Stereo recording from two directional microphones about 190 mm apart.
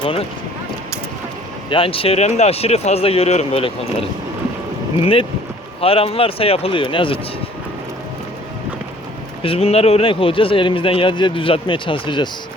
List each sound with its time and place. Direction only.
0.0 s speech: 30° left (ahead or behind)
1.7 s speech: 30° left (ahead or behind)
5.8 s speech: 30° left (ahead or behind)
9.4 s speech: 30° left (ahead or behind)